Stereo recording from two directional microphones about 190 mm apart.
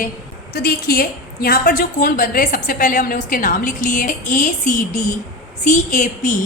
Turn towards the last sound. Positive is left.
turn(degrees=40)  # may be behind; listen again after turning